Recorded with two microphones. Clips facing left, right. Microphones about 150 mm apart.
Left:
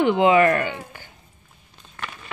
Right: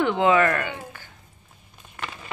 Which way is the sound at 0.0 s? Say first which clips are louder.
Left 3 dB; 15° left (ahead or behind).